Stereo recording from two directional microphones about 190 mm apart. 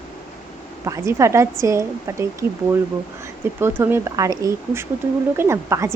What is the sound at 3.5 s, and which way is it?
A woman's voice, 10° right (ahead or behind).